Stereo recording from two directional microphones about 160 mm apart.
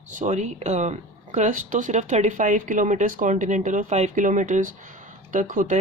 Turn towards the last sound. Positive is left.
turn(degrees=-55)  # may be behind; listen again after turning